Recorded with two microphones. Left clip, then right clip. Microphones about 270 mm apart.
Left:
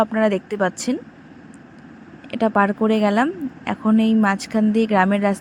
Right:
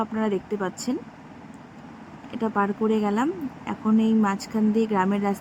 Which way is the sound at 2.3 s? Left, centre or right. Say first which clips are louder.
Left 7 dB; centre.